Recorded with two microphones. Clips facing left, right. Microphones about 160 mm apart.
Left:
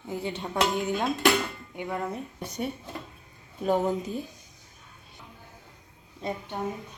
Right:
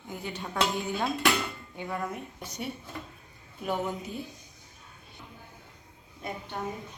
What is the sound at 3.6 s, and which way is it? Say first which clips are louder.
Speech: left 6 dB; 40° left (ahead or behind).